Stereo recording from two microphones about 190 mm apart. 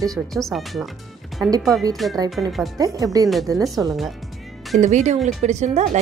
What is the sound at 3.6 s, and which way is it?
Speech, centre (ahead or behind).